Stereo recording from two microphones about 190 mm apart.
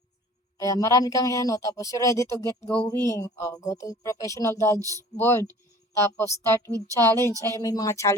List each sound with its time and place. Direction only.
0.6 s speech: 15° left (ahead or behind)
4.8 s speech: 15° right (ahead or behind)
5.1 s speech: 10° left (ahead or behind)
6.7 s speech: 15° right (ahead or behind)
7.4 s speech: 15° left (ahead or behind)